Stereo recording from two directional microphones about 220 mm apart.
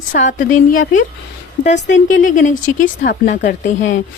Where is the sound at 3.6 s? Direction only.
55° left (ahead or behind).